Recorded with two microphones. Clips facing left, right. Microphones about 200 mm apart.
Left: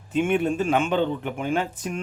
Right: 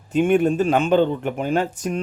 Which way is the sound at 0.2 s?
40° right (ahead or behind).